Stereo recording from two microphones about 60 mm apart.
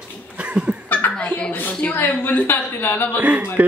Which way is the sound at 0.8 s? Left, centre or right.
Left.